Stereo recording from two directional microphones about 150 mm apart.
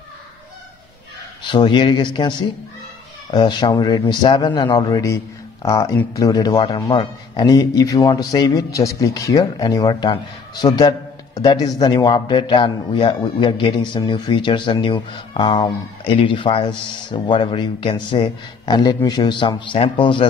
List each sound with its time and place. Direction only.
1.4 s a man's voice: 30° left (ahead or behind)
3.3 s a man's voice: 30° left (ahead or behind)